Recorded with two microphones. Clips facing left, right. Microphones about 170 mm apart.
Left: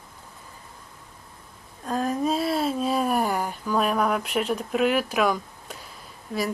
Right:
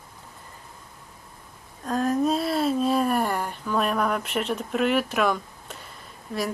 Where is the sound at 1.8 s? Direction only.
Centre (ahead or behind).